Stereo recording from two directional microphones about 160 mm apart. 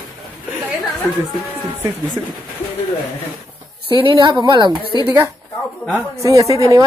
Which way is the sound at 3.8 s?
30° right (ahead or behind).